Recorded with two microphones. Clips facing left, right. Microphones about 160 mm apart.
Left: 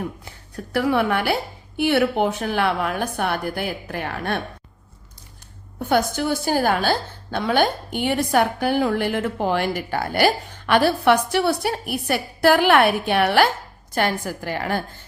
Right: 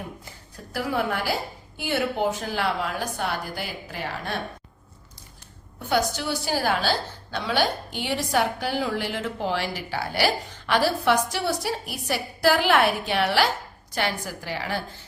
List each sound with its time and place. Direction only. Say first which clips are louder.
0.3 s a woman's voice: left 7 dB; 65° left (ahead or behind)
5.8 s a woman's voice: left 4 dB; 50° left (ahead or behind)